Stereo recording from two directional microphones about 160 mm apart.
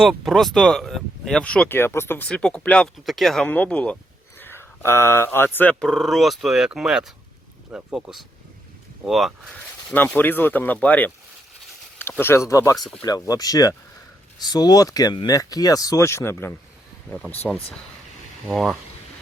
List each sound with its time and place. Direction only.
0.0 s speech: centre (ahead or behind)
9.9 s speech: 10° left (ahead or behind)
17.1 s speech: 5° left (ahead or behind)
18.4 s speech: centre (ahead or behind)